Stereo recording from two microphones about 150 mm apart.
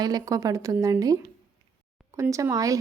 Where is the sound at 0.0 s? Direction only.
25° right (ahead or behind).